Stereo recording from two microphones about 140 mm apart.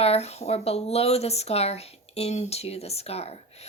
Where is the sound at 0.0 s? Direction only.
50° left (ahead or behind).